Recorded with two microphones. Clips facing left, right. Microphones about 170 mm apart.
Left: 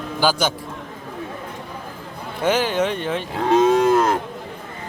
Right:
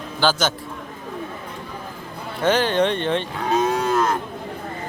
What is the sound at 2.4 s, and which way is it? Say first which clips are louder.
Speech: right 1 dB; 10° left (ahead or behind).